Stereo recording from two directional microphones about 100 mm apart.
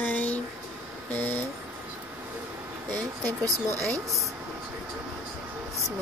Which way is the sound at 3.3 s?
35° right (ahead or behind).